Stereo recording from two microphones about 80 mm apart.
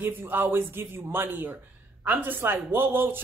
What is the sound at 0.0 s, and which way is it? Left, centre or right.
Speech, right.